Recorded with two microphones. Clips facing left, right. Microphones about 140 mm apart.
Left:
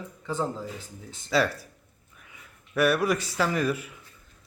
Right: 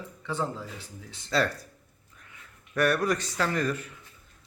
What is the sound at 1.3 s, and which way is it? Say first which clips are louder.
Speech: left 2 dB; 5° left (ahead or behind).